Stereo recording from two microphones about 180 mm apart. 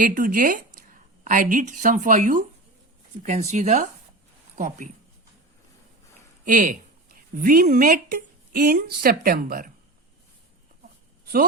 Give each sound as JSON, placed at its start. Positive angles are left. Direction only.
{"t": 0.0, "sound": "a woman's voice", "side_deg": -50}
{"t": 6.4, "sound": "a woman's voice", "side_deg": -50}